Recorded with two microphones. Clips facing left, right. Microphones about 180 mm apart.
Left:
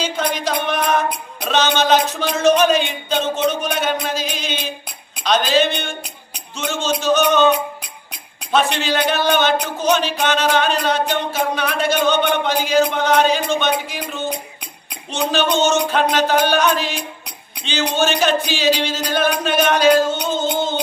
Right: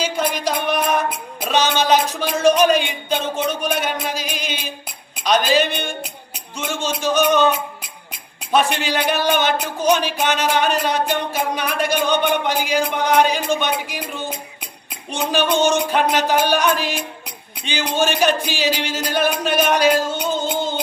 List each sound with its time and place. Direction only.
0.0 s music: 10° right (ahead or behind)
5.2 s speech: 10° right (ahead or behind)